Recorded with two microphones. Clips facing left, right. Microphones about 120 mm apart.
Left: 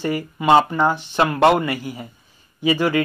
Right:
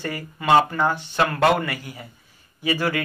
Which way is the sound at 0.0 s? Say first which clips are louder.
Left 6 dB; 15° left (ahead or behind).